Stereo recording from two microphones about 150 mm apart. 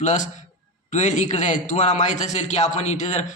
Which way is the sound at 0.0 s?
55° left (ahead or behind).